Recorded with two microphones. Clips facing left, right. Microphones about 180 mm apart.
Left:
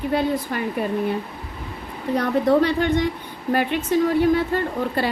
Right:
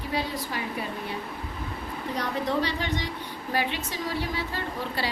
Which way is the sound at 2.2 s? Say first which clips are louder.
Left 10 dB; 55° left (ahead or behind).